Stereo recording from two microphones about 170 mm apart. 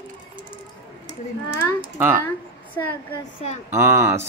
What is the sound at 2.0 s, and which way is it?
Speech, 15° right (ahead or behind).